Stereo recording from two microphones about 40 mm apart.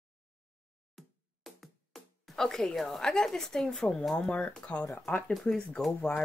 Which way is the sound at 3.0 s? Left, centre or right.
Centre.